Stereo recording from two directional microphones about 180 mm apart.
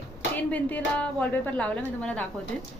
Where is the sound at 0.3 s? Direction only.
10° left (ahead or behind).